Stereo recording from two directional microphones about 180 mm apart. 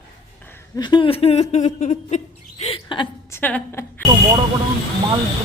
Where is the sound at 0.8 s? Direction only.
25° left (ahead or behind).